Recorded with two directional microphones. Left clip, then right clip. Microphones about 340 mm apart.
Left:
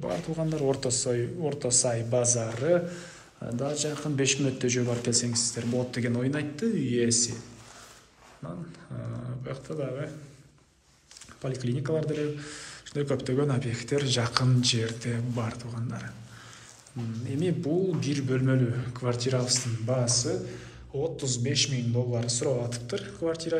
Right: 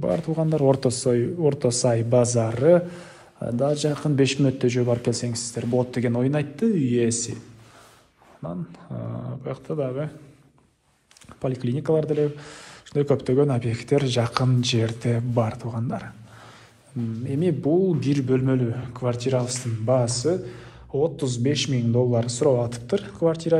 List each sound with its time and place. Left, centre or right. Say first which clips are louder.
0.0 s a man's voice: right 7 dB; centre
8.4 s a man's voice: right 7 dB; centre
11.4 s a man's voice: right 7 dB; centre
17.3 s a man's voice: right 7 dB; centre